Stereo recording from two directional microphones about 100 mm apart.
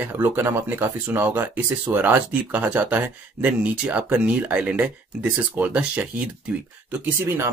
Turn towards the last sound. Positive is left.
turn(degrees=-20)  # may be behind; listen again after turning